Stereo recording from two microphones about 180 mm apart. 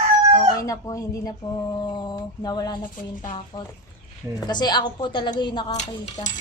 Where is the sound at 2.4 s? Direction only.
20° left (ahead or behind).